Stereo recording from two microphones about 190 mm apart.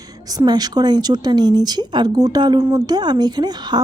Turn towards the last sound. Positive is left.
turn(degrees=-20)  # may be behind; listen again after turning